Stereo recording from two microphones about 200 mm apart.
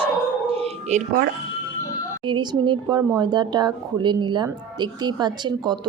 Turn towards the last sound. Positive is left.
turn(degrees=-20)  # may be behind; listen again after turning